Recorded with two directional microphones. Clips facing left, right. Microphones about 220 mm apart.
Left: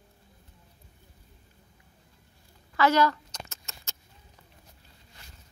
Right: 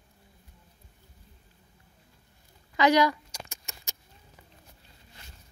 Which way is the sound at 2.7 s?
15° right (ahead or behind).